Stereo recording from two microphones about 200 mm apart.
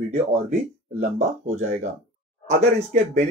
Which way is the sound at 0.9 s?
35° right (ahead or behind).